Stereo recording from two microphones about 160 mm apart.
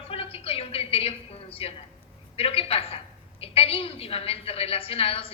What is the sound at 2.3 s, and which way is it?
A woman's voice, 35° left (ahead or behind).